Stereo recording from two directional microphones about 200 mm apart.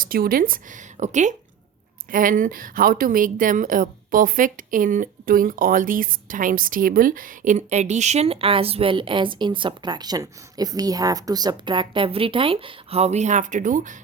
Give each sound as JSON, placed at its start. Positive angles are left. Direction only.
{"t": 0.0, "sound": "a woman's voice", "side_deg": -45}